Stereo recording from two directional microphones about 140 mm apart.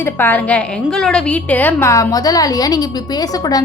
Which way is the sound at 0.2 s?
15° left (ahead or behind).